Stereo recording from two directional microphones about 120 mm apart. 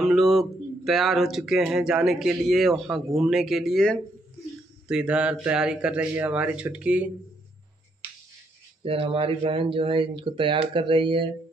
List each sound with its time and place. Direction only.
0.0 s speech: centre (ahead or behind)
4.8 s speech: 5° right (ahead or behind)
8.8 s speech: 50° right (ahead or behind)